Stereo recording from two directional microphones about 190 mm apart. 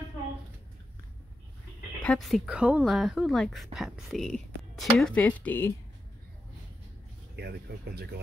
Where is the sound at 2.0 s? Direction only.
5° left (ahead or behind).